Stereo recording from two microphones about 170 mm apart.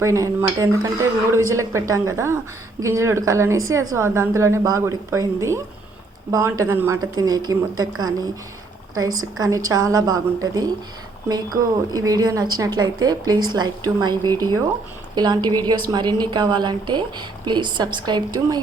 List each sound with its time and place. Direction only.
0.0 s a woman's voice: 15° right (ahead or behind)
9.4 s a woman's voice: 20° right (ahead or behind)